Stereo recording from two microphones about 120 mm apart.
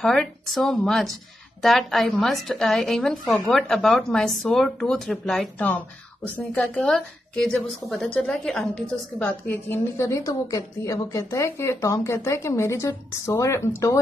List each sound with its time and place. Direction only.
0.0 s a woman's voice: 5° left (ahead or behind)
9.7 s a woman's voice: 25° left (ahead or behind)